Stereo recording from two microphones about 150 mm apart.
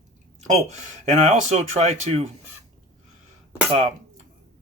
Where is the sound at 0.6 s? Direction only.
50° right (ahead or behind).